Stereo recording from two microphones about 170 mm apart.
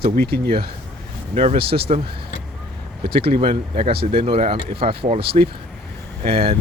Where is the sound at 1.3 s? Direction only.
35° right (ahead or behind).